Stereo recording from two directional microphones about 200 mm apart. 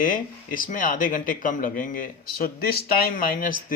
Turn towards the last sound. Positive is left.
turn(degrees=45)  # may be behind; listen again after turning